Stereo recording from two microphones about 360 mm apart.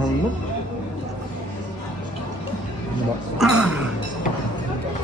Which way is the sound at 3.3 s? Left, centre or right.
Centre.